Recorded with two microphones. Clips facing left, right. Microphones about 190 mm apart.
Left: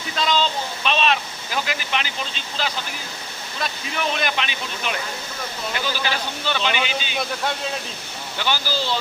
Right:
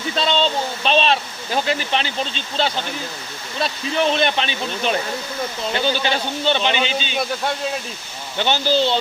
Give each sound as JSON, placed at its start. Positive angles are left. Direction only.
{"t": 0.2, "sound": "speech", "side_deg": -30}
{"t": 8.4, "sound": "speech", "side_deg": -25}